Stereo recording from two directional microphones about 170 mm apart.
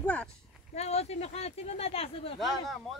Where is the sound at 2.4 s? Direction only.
Centre (ahead or behind).